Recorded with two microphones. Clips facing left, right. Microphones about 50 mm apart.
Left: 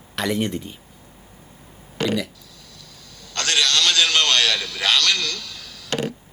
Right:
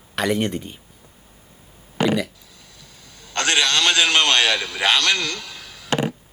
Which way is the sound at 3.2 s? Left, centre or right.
Right.